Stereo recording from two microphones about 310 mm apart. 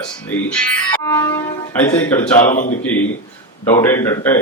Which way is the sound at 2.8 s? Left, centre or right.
Centre.